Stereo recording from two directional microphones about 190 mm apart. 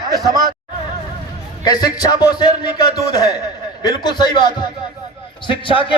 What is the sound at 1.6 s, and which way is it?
Speech, 20° left (ahead or behind).